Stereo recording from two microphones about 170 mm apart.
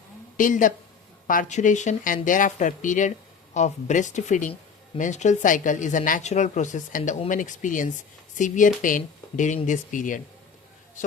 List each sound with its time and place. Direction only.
0.3 s a woman's voice: 50° left (ahead or behind)